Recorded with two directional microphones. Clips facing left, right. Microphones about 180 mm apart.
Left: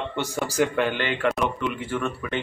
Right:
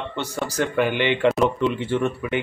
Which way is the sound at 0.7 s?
10° right (ahead or behind).